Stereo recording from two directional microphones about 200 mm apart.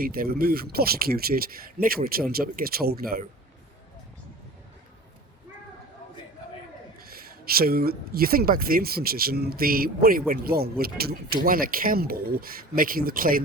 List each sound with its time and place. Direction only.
0.0 s speech: 45° right (ahead or behind)
7.0 s speech: 50° right (ahead or behind)